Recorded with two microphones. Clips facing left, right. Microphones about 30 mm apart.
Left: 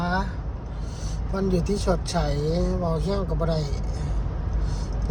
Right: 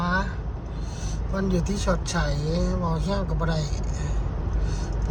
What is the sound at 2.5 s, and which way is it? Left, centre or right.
Speech, right.